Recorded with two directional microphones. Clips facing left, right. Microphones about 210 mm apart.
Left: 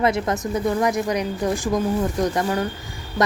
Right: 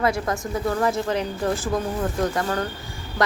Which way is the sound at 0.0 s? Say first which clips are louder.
Left 2 dB; 20° left (ahead or behind).